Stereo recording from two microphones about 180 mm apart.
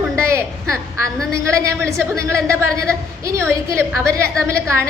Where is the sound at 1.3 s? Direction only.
15° right (ahead or behind).